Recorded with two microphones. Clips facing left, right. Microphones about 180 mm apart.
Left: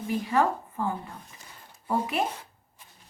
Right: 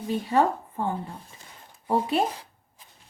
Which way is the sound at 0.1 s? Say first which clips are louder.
Right 2 dB; 30° right (ahead or behind).